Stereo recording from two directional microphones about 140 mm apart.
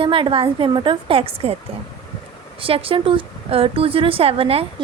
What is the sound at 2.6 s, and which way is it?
Speech, 40° right (ahead or behind).